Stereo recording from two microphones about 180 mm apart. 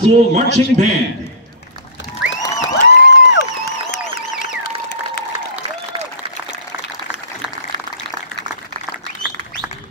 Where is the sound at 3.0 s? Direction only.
70° left (ahead or behind).